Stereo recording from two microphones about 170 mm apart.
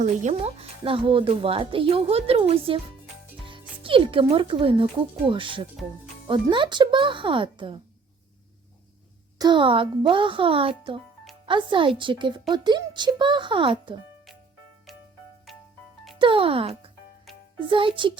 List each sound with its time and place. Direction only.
0.0 s a woman's voice: 45° right (ahead or behind); by 7.8 s 30° right (ahead or behind)
9.4 s a woman's voice: 30° right (ahead or behind)
16.1 s a child's voice: 30° right (ahead or behind)